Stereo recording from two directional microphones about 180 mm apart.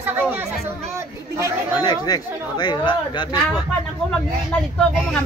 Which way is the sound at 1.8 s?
20° left (ahead or behind).